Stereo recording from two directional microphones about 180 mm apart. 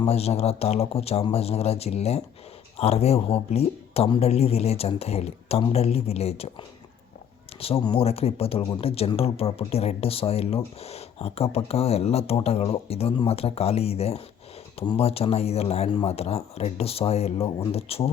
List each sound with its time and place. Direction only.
0.0 s speech: 35° left (ahead or behind)